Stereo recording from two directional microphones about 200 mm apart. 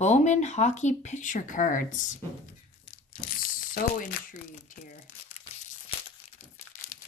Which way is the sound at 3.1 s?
45° left (ahead or behind).